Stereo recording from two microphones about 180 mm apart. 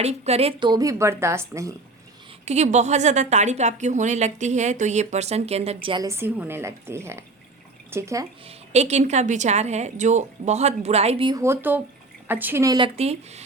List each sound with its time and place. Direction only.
0.0 s a woman's voice: 35° right (ahead or behind)
0.7 s speech: 20° right (ahead or behind)
2.4 s a woman's voice: 40° right (ahead or behind)
6.1 s speech: 15° right (ahead or behind)
8.4 s a woman's voice: 35° right (ahead or behind)
11.3 s speech: 15° right (ahead or behind)
13.0 s a woman's voice: 35° right (ahead or behind)